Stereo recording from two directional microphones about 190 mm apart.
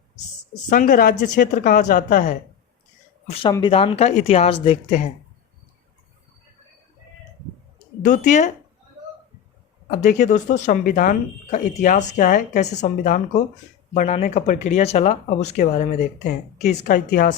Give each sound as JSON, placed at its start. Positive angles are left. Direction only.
{"t": 0.7, "sound": "speech", "side_deg": 45}
{"t": 3.2, "sound": "speech", "side_deg": 30}
{"t": 8.0, "sound": "speech", "side_deg": 40}
{"t": 9.9, "sound": "speech", "side_deg": 40}